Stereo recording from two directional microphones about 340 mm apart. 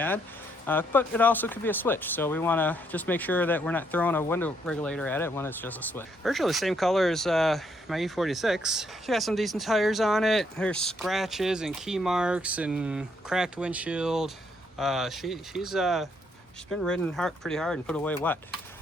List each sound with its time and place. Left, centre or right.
0.7 s speech: centre